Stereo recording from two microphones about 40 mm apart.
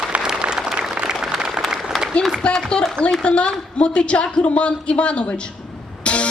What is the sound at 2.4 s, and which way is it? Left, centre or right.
A woman's voice, left.